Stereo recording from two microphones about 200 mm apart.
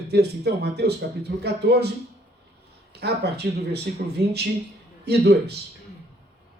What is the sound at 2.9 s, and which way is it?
Speech, 55° right (ahead or behind).